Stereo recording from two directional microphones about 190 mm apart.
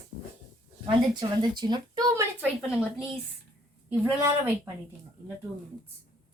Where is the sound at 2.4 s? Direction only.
10° left (ahead or behind).